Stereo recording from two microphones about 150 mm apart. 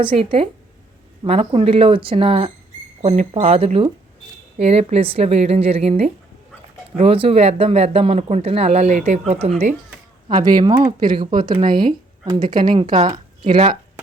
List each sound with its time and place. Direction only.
0.0 s speech: 35° right (ahead or behind)
10.2 s speech: 30° right (ahead or behind)